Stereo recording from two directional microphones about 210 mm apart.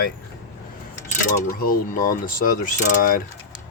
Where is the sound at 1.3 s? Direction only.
45° left (ahead or behind).